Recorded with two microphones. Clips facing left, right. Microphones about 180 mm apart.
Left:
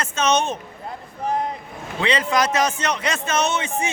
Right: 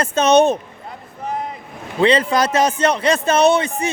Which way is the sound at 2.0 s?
30° right (ahead or behind).